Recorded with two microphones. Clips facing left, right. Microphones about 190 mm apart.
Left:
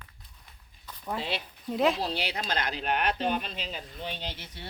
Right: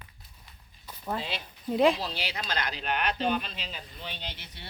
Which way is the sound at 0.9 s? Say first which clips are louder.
Right 1 dB; 10° right (ahead or behind).